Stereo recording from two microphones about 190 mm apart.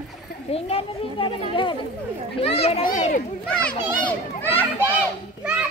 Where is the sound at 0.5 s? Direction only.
30° left (ahead or behind).